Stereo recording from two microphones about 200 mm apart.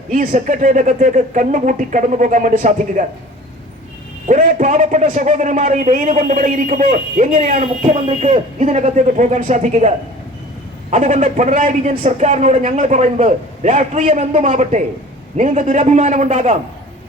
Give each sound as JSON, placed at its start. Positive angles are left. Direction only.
{"t": 0.1, "sound": "a man's voice", "side_deg": -40}
{"t": 4.3, "sound": "a man's voice", "side_deg": -40}
{"t": 10.9, "sound": "a man's voice", "side_deg": -40}